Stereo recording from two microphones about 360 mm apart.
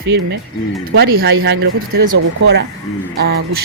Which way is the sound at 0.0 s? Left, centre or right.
Right.